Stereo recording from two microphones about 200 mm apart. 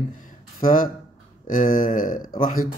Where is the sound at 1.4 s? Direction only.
45° left (ahead or behind).